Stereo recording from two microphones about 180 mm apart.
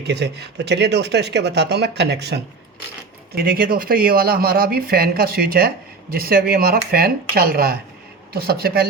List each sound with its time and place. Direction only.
0.0 s speech: 70° right (ahead or behind)
3.3 s speech: 55° right (ahead or behind)